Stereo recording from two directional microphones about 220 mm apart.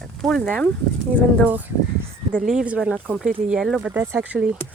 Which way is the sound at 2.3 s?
Centre (ahead or behind).